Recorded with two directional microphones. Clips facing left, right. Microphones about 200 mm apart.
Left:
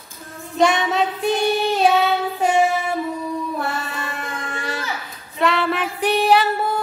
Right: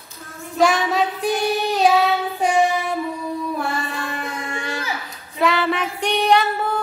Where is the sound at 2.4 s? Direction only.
5° left (ahead or behind).